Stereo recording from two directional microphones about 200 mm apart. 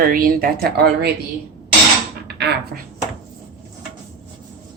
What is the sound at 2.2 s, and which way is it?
Speech, 55° right (ahead or behind).